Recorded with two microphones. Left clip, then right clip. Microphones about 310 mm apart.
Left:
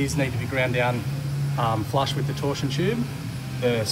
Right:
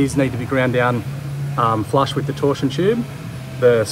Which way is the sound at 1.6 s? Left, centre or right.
Right.